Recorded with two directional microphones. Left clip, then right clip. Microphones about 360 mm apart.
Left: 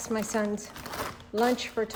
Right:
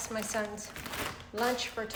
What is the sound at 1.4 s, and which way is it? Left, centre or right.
Speech, left.